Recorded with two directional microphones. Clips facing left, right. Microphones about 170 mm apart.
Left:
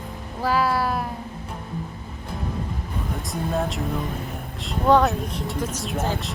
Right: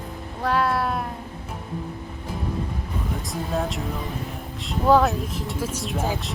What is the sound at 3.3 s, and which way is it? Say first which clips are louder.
Speech: left 2 dB; centre (ahead or behind).